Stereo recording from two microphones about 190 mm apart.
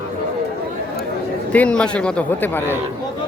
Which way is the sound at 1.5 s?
5° left (ahead or behind).